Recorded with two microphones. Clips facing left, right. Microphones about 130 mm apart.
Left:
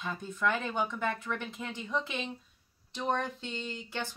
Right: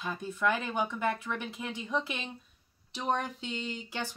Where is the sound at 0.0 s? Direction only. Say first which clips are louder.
Right 1 dB; 5° right (ahead or behind).